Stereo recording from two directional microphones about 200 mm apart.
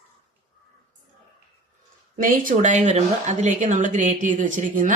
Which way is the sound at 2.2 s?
40° right (ahead or behind).